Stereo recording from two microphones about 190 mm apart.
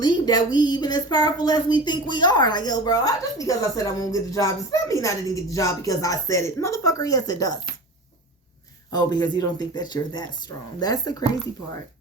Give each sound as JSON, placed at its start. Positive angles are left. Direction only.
{"t": 0.0, "sound": "speech", "side_deg": 20}
{"t": 8.9, "sound": "speech", "side_deg": 20}